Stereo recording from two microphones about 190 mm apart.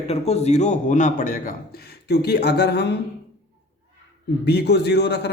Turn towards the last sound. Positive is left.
turn(degrees=65)  # may be behind; listen again after turning